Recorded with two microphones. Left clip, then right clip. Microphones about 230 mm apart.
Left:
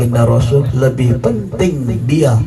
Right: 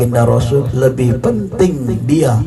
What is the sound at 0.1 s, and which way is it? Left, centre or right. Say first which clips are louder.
A man's voice: right 1 dB; right.